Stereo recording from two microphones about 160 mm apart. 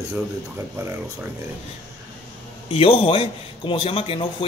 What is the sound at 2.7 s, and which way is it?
A man's voice, 35° left (ahead or behind).